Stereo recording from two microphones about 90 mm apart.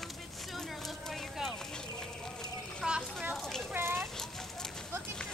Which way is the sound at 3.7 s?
25° right (ahead or behind).